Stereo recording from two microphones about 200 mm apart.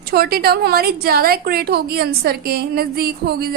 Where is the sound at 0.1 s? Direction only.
50° right (ahead or behind).